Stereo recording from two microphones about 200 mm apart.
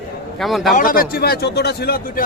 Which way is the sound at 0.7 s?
45° left (ahead or behind).